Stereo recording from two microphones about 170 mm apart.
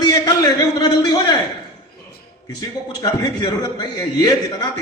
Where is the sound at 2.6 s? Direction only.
20° left (ahead or behind).